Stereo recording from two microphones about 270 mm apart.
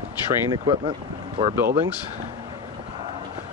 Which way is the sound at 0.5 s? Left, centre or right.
Centre.